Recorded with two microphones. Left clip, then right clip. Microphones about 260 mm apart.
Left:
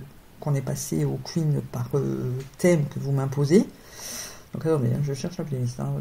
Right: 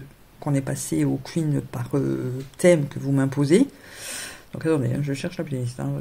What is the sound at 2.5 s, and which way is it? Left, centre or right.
Speech, right.